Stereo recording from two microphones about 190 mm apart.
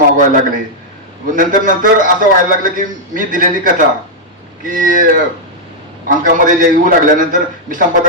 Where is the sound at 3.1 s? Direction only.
45° right (ahead or behind).